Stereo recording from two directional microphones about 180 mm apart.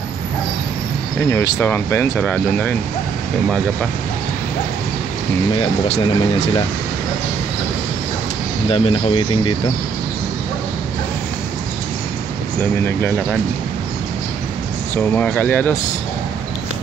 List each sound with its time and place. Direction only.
1.3 s speech: 15° left (ahead or behind)
5.6 s speech: 35° left (ahead or behind)
8.6 s speech: 30° left (ahead or behind)
15.0 s speech: 10° left (ahead or behind)